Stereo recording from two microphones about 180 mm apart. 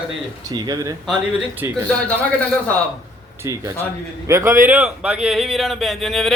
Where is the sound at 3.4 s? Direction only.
20° right (ahead or behind).